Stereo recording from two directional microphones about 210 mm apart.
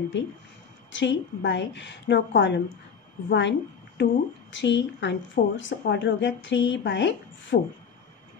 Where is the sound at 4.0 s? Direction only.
60° left (ahead or behind).